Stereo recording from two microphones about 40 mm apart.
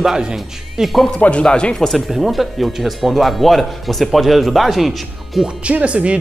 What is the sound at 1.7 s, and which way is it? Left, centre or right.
Speech, centre.